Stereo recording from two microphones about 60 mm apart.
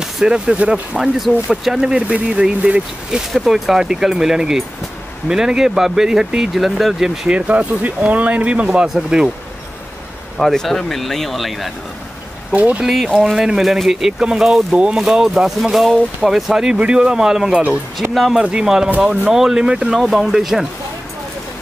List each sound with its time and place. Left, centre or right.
0.0 s speech: centre
1.1 s speech: centre
3.1 s speech: centre
7.2 s speech: right
10.4 s speech: centre
12.5 s speech: right
12.8 s speech: centre
18.4 s speech: centre